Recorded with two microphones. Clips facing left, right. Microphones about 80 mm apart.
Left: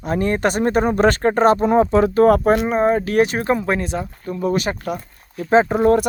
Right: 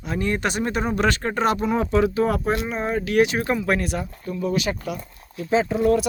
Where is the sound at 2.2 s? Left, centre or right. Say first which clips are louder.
Left 8 dB; left.